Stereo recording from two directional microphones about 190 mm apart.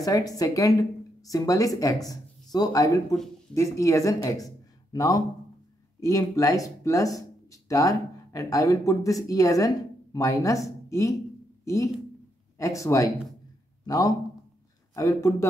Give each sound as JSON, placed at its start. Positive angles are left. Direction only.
{"t": 0.0, "sound": "a man's voice", "side_deg": 20}